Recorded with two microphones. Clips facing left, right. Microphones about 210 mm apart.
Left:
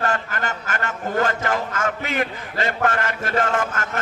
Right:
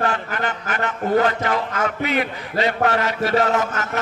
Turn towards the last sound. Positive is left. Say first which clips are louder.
# right 2 dB
turn(degrees=50)  # may be behind; listen again after turning